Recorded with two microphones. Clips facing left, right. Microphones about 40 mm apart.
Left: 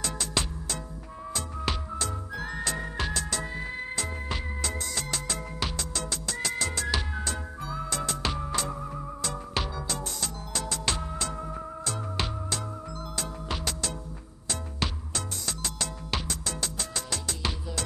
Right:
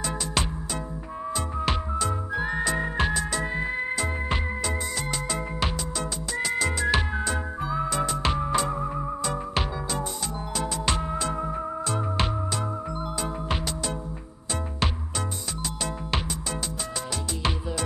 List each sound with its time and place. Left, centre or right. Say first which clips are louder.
1.3 s music: right 4 dB; centre
17.4 s music: right 5 dB; right